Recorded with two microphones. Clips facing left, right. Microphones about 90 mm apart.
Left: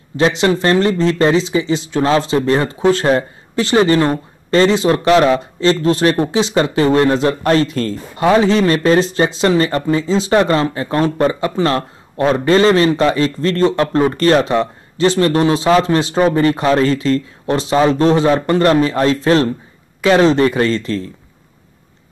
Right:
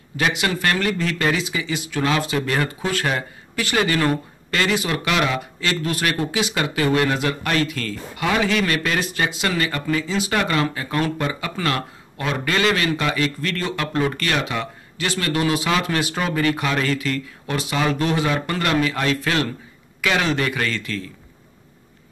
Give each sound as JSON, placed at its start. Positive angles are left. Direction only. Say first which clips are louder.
{"t": 0.2, "sound": "speech", "louder": "left 8 dB", "side_deg": 30}